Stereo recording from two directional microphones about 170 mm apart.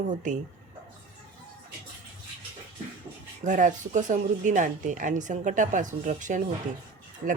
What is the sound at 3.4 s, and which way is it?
A woman's voice, 50° right (ahead or behind).